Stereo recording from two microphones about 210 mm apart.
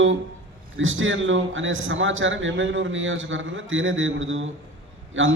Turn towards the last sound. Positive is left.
turn(degrees=-65)  # may be behind; listen again after turning